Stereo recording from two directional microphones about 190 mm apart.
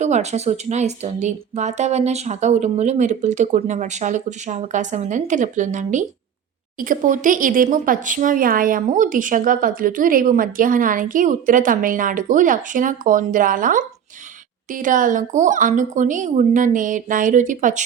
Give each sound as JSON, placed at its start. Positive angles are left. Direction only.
{"t": 0.0, "sound": "a woman's voice", "side_deg": -35}